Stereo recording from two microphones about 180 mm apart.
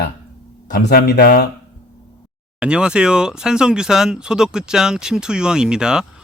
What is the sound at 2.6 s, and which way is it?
Speech, 5° right (ahead or behind).